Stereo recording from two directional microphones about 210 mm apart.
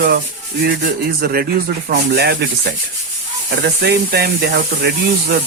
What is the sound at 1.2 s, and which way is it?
Speech, 45° right (ahead or behind).